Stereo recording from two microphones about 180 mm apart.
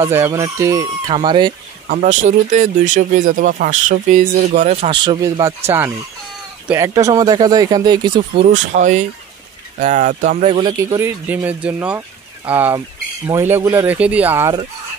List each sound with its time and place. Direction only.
0.1 s speech: 15° right (ahead or behind)
2.0 s speech: 45° right (ahead or behind); by 8.5 s 25° right (ahead or behind)
8.7 s speech: 40° right (ahead or behind)
11.0 s speech: 10° right (ahead or behind)